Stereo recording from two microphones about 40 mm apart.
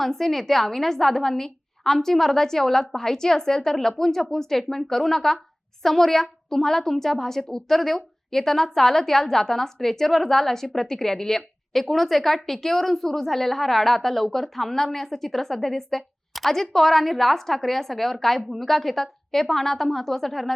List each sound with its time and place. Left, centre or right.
0.0 s a woman's voice: centre